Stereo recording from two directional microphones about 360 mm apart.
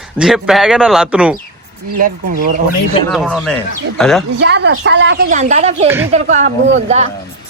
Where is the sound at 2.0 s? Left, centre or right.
Right.